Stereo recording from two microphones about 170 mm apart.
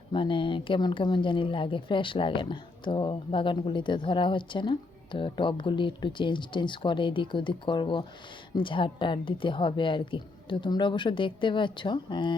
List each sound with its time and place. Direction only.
0.1 s speech: 30° left (ahead or behind)